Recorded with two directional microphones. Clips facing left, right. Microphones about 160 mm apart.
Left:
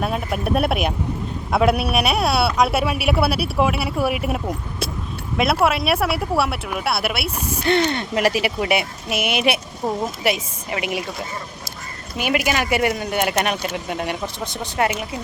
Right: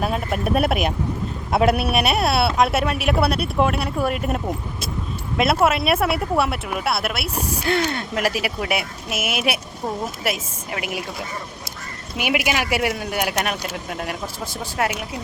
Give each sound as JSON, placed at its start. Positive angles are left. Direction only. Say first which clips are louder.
{"t": 0.0, "sound": "speech", "louder": "even", "side_deg": 0}
{"t": 12.1, "sound": "speech", "louder": "left 1 dB", "side_deg": -10}
{"t": 14.8, "sound": "speech", "louder": "left 2 dB", "side_deg": 5}